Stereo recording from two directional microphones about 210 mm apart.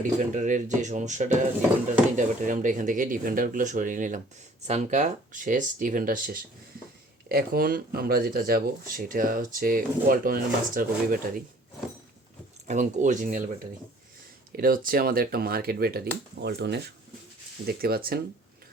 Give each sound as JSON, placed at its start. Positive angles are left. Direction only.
{"t": 0.0, "sound": "speech", "side_deg": -35}
{"t": 12.6, "sound": "speech", "side_deg": -35}
{"t": 14.5, "sound": "speech", "side_deg": -45}